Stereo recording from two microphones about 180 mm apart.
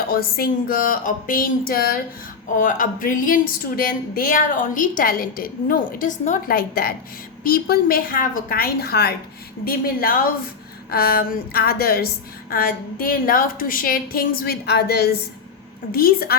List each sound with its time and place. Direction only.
0.1 s a woman's voice: 55° left (ahead or behind)